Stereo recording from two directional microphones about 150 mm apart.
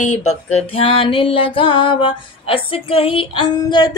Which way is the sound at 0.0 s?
50° left (ahead or behind).